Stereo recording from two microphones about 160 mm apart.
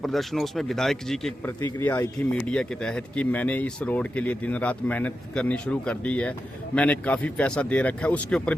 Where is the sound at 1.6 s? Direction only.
15° left (ahead or behind).